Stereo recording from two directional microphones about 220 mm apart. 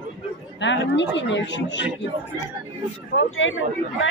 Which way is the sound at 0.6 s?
55° left (ahead or behind).